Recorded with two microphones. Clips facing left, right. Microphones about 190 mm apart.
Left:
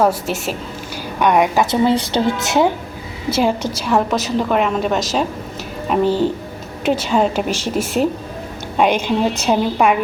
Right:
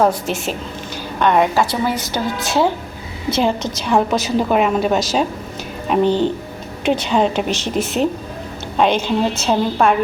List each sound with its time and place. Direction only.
0.0 s a woman's voice: 5° left (ahead or behind)
3.3 s a woman's voice: 10° left (ahead or behind)